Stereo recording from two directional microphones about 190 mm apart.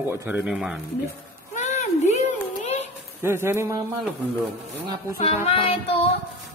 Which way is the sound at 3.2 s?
15° right (ahead or behind).